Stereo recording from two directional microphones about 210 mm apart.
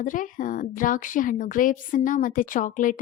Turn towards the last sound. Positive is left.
turn(degrees=40)  # may be behind; listen again after turning